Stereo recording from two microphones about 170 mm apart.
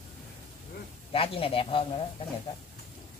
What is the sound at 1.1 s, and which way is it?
Speech, 35° left (ahead or behind).